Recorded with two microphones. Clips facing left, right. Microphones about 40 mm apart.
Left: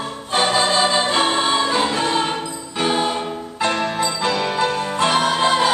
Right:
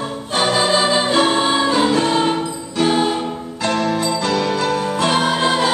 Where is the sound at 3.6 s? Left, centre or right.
Centre.